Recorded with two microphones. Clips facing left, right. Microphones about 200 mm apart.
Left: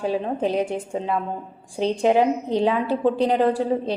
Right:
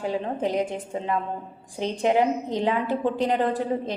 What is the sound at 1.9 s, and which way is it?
A woman's voice, 15° left (ahead or behind).